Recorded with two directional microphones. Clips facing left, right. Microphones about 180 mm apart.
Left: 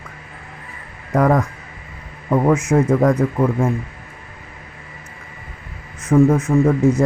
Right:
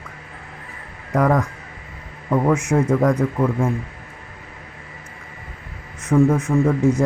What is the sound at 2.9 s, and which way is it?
Speech, 10° left (ahead or behind).